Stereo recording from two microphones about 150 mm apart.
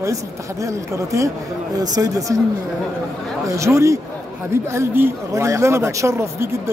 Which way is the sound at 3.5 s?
20° right (ahead or behind).